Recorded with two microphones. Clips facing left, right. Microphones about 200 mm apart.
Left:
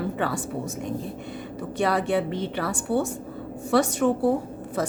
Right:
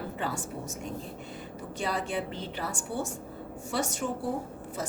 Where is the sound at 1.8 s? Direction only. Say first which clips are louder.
Left 9 dB; 65° left (ahead or behind).